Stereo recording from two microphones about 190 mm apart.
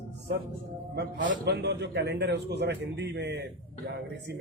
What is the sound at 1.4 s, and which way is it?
A man's voice, 65° right (ahead or behind).